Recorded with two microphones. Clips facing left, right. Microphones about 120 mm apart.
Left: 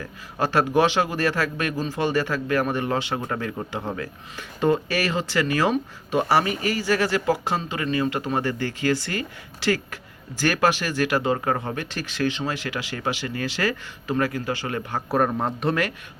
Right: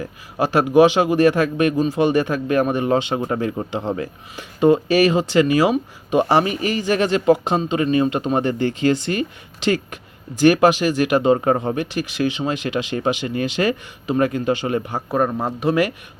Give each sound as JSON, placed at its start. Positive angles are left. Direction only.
{"t": 0.0, "sound": "a man's voice", "side_deg": -15}
{"t": 15.1, "sound": "speech", "side_deg": 0}